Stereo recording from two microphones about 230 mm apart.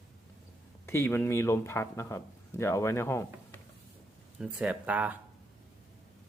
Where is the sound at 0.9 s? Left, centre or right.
Centre.